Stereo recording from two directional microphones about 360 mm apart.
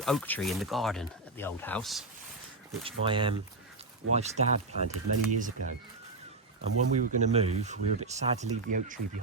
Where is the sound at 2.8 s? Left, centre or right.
Centre.